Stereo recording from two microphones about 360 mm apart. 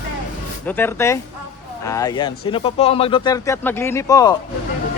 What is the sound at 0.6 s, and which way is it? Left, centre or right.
Speech, centre.